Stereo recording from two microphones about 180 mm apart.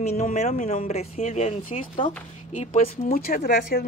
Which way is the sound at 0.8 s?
35° left (ahead or behind).